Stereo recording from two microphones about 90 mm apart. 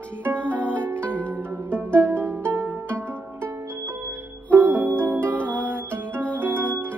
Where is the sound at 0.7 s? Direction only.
15° left (ahead or behind).